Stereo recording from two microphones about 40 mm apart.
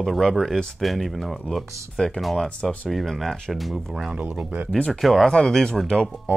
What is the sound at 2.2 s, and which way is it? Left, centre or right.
Speech, centre.